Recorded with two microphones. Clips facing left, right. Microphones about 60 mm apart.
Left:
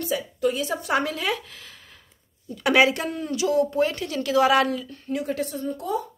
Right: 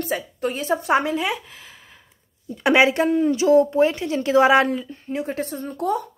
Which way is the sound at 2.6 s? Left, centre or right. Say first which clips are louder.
Right 3 dB; right.